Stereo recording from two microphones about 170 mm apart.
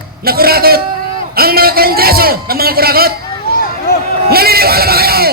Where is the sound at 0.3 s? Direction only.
65° right (ahead or behind).